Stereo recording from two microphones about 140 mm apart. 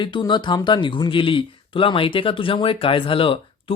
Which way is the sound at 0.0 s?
35° left (ahead or behind).